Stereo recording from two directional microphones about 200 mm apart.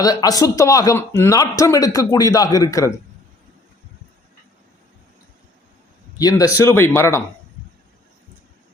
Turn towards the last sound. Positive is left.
turn(degrees=15)  # may be behind; listen again after turning